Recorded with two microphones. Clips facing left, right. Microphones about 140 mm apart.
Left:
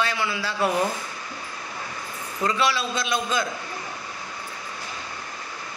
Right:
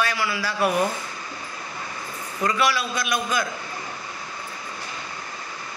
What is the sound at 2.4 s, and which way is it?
A man's voice, 25° left (ahead or behind).